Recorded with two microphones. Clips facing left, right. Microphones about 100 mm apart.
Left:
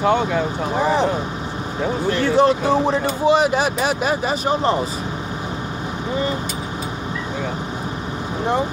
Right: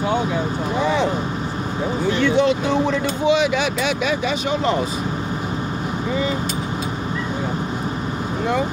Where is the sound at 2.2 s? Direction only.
40° left (ahead or behind).